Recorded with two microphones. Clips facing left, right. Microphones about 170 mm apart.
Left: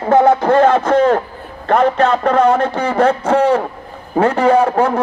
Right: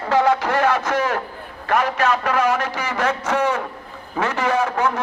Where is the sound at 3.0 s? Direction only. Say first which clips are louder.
Left 9 dB; 55° left (ahead or behind).